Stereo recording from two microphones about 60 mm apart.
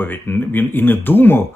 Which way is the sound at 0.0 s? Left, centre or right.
Left.